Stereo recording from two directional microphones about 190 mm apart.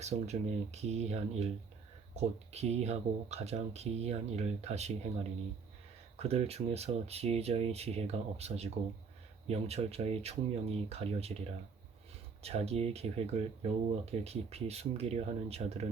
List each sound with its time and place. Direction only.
0.0 s speech: 35° right (ahead or behind)
2.5 s speech: 35° right (ahead or behind)
6.1 s speech: 35° right (ahead or behind)